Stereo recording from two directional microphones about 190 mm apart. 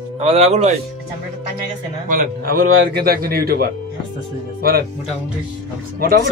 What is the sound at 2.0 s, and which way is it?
Speech, 45° right (ahead or behind).